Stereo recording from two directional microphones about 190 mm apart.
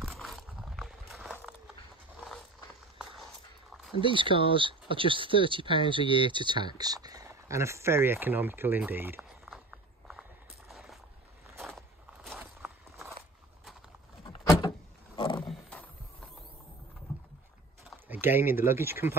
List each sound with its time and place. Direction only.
0.0 s a sound: centre (ahead or behind)
4.0 s speech: 25° right (ahead or behind); by 10.2 s 5° right (ahead or behind)
10.7 s boat: centre (ahead or behind)
11.6 s walk: centre (ahead or behind)
15.1 s roaring cats: 25° left (ahead or behind)
15.4 s wild animals: centre (ahead or behind)
17.8 s speech: 10° right (ahead or behind)